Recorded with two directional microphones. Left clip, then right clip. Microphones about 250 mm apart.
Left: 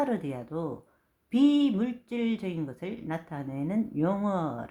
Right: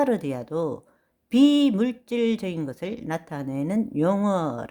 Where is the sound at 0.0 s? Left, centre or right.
Right.